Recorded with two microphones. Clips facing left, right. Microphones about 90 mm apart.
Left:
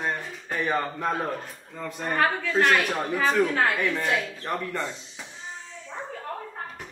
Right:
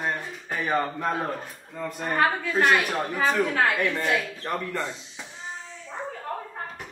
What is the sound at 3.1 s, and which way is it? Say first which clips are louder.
Speech: left 1 dB; 25° right (ahead or behind).